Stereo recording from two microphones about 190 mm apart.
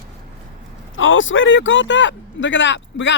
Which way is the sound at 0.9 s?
90° left.